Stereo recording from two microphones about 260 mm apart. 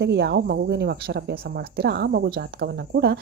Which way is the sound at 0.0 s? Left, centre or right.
Right.